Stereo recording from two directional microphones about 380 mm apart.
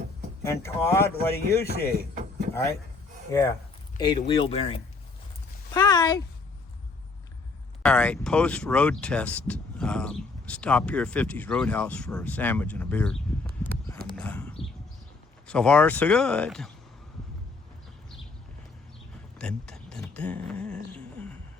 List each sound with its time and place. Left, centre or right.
0.4 s speech: centre
1.6 s speech: left
3.9 s speech: centre
7.8 s speech: centre
14.2 s a sound: centre
15.4 s speech: centre
19.4 s speech: centre
20.9 s a sound: centre